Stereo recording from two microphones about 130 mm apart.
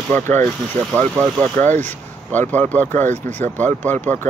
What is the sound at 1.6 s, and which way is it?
Speech, 15° left (ahead or behind).